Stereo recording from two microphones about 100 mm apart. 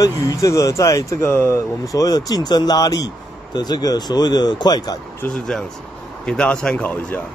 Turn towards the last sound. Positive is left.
turn(degrees=10)  # may be behind; listen again after turning